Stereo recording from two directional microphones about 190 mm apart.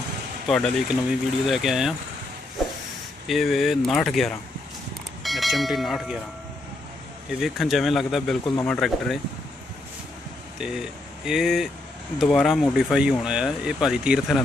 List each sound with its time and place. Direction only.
0.5 s speech: centre (ahead or behind)
2.6 s a sound: centre (ahead or behind)
3.3 s speech: centre (ahead or behind)
7.3 s speech: centre (ahead or behind)
10.6 s speech: 5° right (ahead or behind)